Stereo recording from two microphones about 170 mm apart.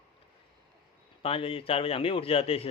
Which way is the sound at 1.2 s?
35° left (ahead or behind).